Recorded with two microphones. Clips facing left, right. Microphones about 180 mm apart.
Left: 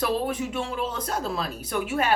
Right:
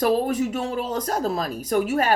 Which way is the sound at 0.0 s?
45° right (ahead or behind).